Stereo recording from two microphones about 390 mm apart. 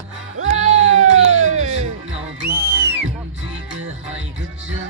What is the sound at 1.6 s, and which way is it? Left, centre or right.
Music, centre.